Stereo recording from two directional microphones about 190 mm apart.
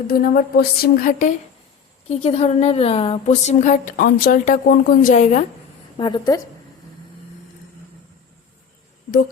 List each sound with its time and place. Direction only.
0.1 s speech: 50° left (ahead or behind)
2.0 s a woman's voice: 35° left (ahead or behind)
6.0 s a woman's voice: 20° left (ahead or behind)